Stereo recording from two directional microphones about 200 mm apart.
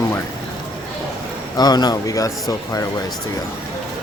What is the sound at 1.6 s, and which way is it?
A man's voice, 20° left (ahead or behind).